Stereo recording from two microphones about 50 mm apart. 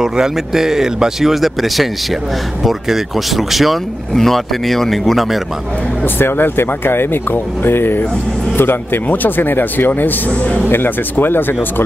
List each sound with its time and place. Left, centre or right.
0.0 s speech: centre
6.1 s speech: left